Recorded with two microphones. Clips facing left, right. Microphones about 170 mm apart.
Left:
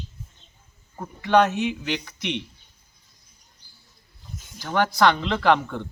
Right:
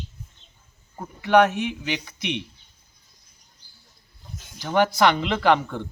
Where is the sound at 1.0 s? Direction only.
10° right (ahead or behind).